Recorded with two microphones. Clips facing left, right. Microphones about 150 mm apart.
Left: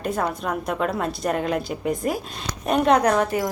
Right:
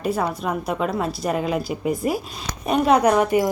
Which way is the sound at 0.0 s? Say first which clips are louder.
Right 2 dB; 5° right (ahead or behind).